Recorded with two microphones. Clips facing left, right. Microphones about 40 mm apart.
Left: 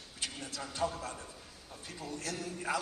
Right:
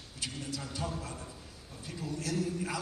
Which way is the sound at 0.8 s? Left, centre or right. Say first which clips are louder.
Left 3 dB; centre.